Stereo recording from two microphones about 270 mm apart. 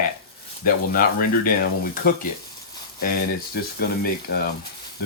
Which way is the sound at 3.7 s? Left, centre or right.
Left.